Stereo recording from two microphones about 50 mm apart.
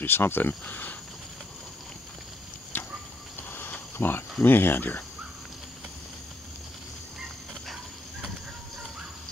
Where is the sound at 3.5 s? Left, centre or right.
Left.